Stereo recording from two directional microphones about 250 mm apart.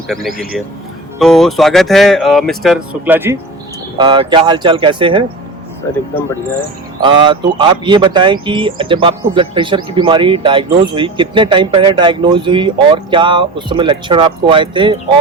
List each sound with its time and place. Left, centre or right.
1.2 s speech: centre
7.0 s speech: centre